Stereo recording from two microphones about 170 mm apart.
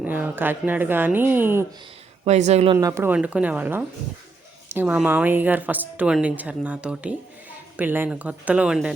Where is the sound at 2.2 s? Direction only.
40° right (ahead or behind).